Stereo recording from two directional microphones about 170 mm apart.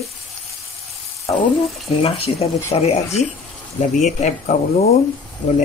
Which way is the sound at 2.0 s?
35° left (ahead or behind).